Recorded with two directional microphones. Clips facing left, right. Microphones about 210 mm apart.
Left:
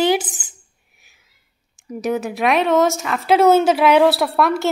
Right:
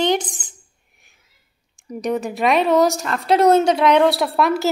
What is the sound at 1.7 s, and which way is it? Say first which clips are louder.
Speech: left 1 dB; 5° left (ahead or behind).